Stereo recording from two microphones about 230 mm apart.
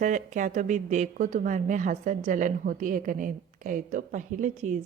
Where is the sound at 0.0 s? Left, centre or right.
Right.